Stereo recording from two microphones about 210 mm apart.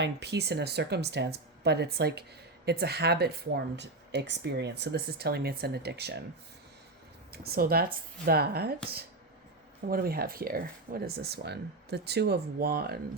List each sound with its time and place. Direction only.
0.0 s speech: 55° right (ahead or behind)
7.3 s speech: 45° right (ahead or behind)
9.8 s speech: 45° right (ahead or behind)